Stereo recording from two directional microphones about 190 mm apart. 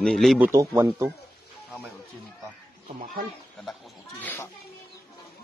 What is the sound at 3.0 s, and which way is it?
Speech, 50° right (ahead or behind).